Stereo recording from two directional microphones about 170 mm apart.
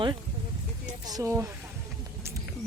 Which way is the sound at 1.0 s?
20° right (ahead or behind).